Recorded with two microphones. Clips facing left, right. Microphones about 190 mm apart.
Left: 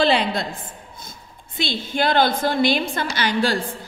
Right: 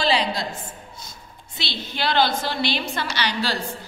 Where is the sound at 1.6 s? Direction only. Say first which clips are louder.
Left 6 dB; 50° left (ahead or behind).